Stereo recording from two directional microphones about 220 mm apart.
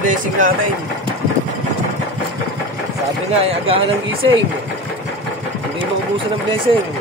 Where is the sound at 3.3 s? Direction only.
25° right (ahead or behind).